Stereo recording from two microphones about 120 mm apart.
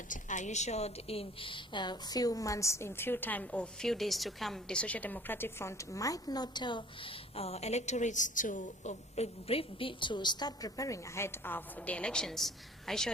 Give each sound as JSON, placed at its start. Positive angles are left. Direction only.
{"t": 0.1, "sound": "a woman's voice", "side_deg": 90}